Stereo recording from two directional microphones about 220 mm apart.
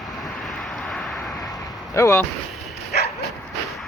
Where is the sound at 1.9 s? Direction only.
10° left (ahead or behind).